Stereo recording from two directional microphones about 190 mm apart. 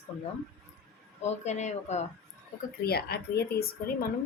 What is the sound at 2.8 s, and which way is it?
Speech, 55° left (ahead or behind).